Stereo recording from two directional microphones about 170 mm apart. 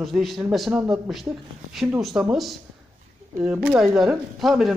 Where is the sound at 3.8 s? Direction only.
Centre (ahead or behind).